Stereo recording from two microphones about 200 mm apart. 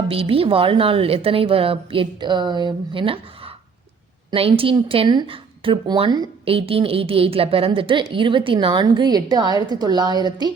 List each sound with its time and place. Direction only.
0.1 s speech: 30° right (ahead or behind)